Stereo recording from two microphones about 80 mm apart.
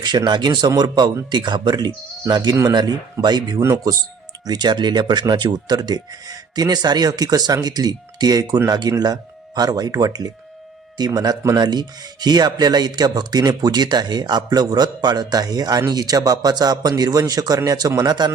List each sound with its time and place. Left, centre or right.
0.3 s speech: right
3.6 s speech: right
4.4 s speech: right